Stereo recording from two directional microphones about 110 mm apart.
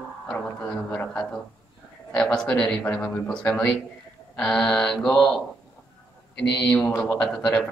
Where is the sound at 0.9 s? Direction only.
20° left (ahead or behind).